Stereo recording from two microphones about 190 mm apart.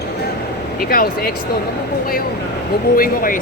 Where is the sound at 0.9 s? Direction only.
50° left (ahead or behind).